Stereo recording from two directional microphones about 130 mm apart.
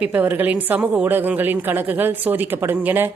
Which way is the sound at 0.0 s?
15° right (ahead or behind).